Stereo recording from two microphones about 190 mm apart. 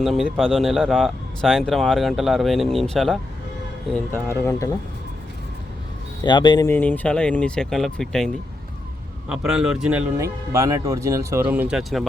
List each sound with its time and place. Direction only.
0.0 s speech: centre (ahead or behind)
6.2 s speech: 25° left (ahead or behind)
6.7 s speech: 10° left (ahead or behind)
9.3 s speech: 5° right (ahead or behind)